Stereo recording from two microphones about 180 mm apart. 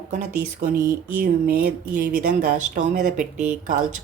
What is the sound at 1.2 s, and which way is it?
Speech, 55° right (ahead or behind).